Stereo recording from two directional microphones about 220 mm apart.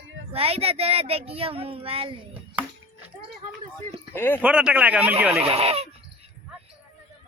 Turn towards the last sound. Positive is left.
turn(degrees=-25)  # may be behind; listen again after turning